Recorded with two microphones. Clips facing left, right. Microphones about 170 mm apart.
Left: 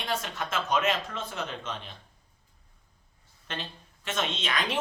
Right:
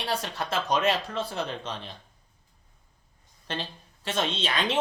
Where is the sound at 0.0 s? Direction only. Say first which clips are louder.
Right 2 dB; 35° right (ahead or behind).